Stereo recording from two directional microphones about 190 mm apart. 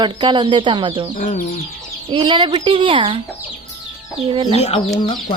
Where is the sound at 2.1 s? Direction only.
25° right (ahead or behind).